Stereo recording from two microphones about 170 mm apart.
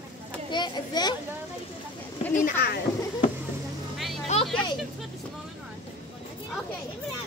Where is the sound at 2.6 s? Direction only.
70° left (ahead or behind).